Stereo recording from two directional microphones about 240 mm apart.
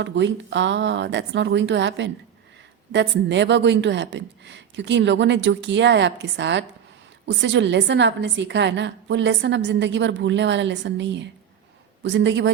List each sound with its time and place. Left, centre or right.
0.0 s a woman's voice: right